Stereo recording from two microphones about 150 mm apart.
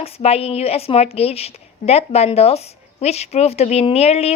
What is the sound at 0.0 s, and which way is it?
A woman's voice, 40° left (ahead or behind).